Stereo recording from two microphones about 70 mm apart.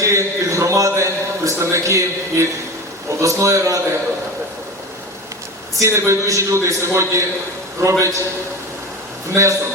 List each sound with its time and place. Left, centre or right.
0.0 s a man's voice: right
5.8 s a man's voice: right
9.3 s a man's voice: right